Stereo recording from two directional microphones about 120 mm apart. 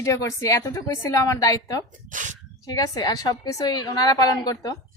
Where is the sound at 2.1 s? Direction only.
90° right.